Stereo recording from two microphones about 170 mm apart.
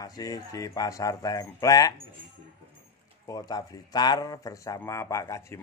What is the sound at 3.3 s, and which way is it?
Speech, 25° left (ahead or behind).